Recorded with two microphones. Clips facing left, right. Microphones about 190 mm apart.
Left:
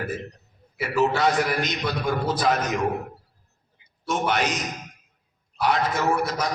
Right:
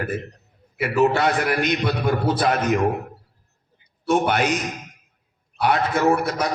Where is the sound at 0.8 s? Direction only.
60° right (ahead or behind).